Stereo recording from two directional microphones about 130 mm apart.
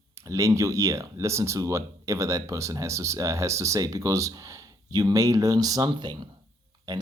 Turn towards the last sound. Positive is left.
turn(degrees=-30)  # may be behind; listen again after turning